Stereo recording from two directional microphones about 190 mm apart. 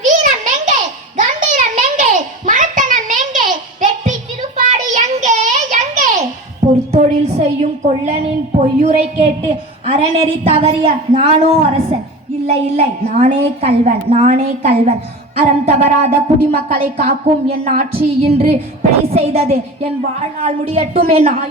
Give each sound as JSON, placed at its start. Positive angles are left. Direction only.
{"t": 0.0, "sound": "a sound", "side_deg": -40}
{"t": 4.5, "sound": "child singing", "side_deg": -40}
{"t": 6.9, "sound": "a woman's voice", "side_deg": -35}